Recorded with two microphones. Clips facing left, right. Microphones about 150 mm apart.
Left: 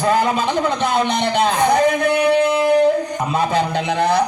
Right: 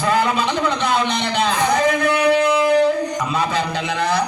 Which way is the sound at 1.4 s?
50° left (ahead or behind).